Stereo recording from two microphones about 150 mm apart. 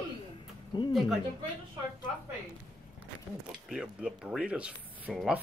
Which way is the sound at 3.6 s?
5° right (ahead or behind).